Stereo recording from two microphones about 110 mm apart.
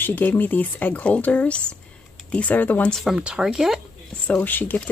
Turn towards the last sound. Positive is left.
turn(degrees=15)  # may be behind; listen again after turning